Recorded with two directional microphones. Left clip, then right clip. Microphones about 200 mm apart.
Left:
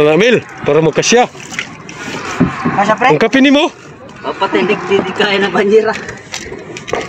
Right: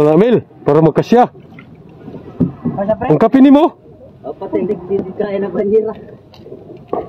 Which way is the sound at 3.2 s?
20° right (ahead or behind).